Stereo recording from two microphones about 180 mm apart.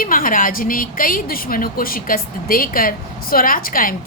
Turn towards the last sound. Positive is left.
turn(degrees=50)  # may be behind; listen again after turning